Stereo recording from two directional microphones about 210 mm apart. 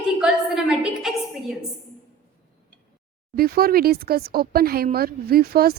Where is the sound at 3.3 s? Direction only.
45° right (ahead or behind).